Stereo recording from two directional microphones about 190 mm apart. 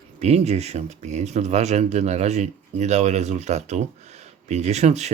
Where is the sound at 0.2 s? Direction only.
35° right (ahead or behind).